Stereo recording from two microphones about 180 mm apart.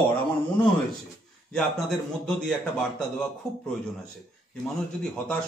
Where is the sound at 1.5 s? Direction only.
Centre (ahead or behind).